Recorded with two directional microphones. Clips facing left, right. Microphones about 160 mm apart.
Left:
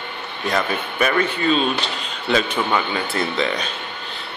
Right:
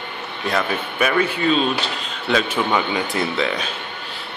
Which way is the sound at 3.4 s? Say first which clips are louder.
Even; 5° right (ahead or behind).